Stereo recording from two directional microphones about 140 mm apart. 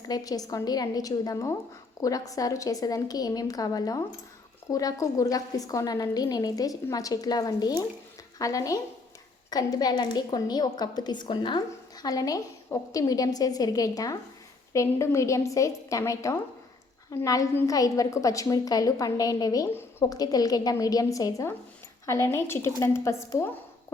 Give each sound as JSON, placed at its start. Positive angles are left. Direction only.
{"t": 0.1, "sound": "a woman's voice", "side_deg": 25}
{"t": 19.7, "sound": "a woman's voice", "side_deg": 15}
{"t": 20.1, "sound": "a woman's voice", "side_deg": 25}